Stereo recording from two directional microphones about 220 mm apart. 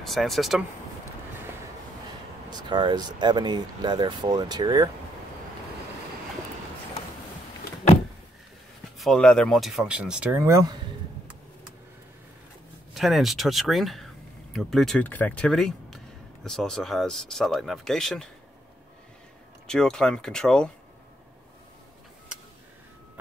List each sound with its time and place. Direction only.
0.0 s speech: centre (ahead or behind)
2.5 s speech: 20° right (ahead or behind)
8.9 s speech: centre (ahead or behind); by 10.8 s 15° right (ahead or behind)
12.9 s speech: centre (ahead or behind)
19.7 s speech: 5° left (ahead or behind)